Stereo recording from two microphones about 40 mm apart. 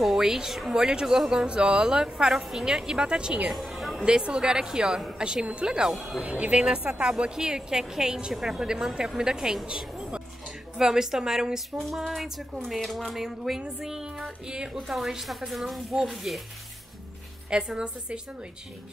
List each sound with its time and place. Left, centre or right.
0.2 s speech: centre
0.5 s a woman's voice: centre
0.7 s speech: centre
3.5 s music: centre
4.0 s speech: right
5.9 s a woman's voice: centre
6.2 s a woman's voice: right
8.3 s a woman's voice: centre
9.7 s a sound: right
10.8 s a woman's voice: centre
12.2 s a woman's voice: centre
14.1 s speech: right
14.9 s a woman's voice: centre
17.5 s speech: right